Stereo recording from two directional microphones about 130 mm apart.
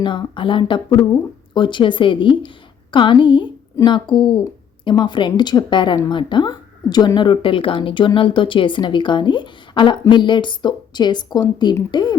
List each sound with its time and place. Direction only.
0.0 s speech: 40° left (ahead or behind)